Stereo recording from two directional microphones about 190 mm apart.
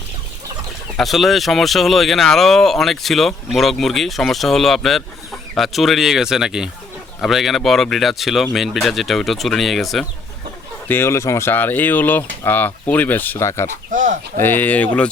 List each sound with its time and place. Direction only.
0.9 s speech: centre (ahead or behind)
10.8 s speech: 10° left (ahead or behind)
13.9 s speech: 40° right (ahead or behind)
14.4 s speech: 10° left (ahead or behind)